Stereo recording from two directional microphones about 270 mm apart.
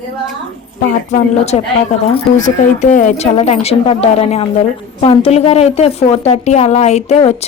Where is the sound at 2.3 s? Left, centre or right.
Left.